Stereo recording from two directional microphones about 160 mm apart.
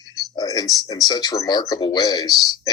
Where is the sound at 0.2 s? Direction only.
25° left (ahead or behind).